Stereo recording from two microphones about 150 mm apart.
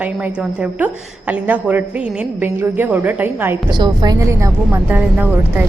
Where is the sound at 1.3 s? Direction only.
10° right (ahead or behind).